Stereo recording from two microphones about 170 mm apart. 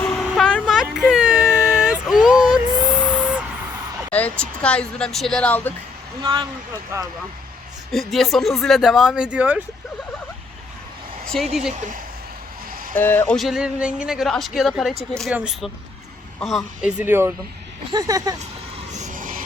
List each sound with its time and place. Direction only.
0.0 s vehicle: 5° left (ahead or behind)
3.0 s a sound: 10° left (ahead or behind)
3.2 s a sound: 5° right (ahead or behind)
4.1 s speech: 10° left (ahead or behind)
6.2 s speech: 30° right (ahead or behind)
7.9 s speech: centre (ahead or behind)
11.3 s speech: 5° left (ahead or behind)
12.9 s speech: 10° left (ahead or behind); by 18.3 s 20° right (ahead or behind)
18.9 s a sound: 50° right (ahead or behind)